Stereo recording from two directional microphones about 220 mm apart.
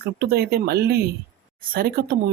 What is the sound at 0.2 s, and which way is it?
Speech, 45° right (ahead or behind).